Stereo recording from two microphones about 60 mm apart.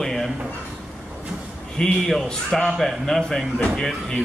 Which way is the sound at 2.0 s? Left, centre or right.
Centre.